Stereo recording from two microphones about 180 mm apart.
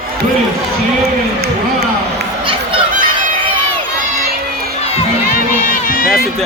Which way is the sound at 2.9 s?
50° right (ahead or behind).